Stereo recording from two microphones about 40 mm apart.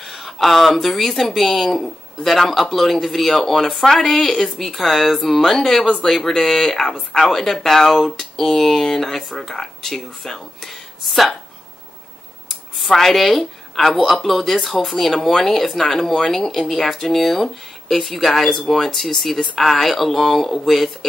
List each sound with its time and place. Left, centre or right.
0.0 s speech: centre
12.7 s a woman's voice: centre
19.3 s speech: centre
19.7 s speech: centre